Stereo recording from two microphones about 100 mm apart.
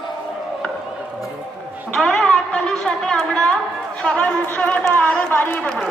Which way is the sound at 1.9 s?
Centre (ahead or behind).